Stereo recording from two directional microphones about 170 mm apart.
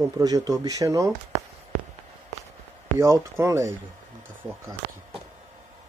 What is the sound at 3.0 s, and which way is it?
Speech, 20° right (ahead or behind).